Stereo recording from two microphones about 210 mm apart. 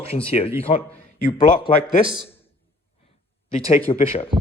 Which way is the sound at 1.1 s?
40° left (ahead or behind).